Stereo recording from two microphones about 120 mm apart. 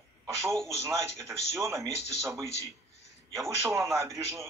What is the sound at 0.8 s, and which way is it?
A woman's voice, 25° right (ahead or behind).